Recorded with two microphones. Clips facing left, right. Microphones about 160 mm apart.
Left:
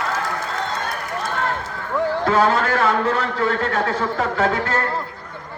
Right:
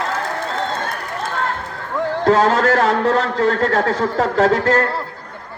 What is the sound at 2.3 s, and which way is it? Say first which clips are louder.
A man's voice: right 5 dB; 40° right (ahead or behind).